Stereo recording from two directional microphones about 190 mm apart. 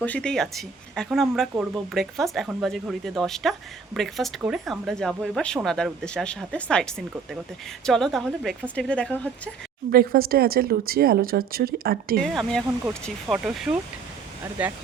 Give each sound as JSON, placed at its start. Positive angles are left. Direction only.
{"t": 0.0, "sound": "speech", "side_deg": 5}
{"t": 9.9, "sound": "speech", "side_deg": -50}
{"t": 12.2, "sound": "speech", "side_deg": 0}
{"t": 12.8, "sound": "speech", "side_deg": -15}
{"t": 13.3, "sound": "speech", "side_deg": 0}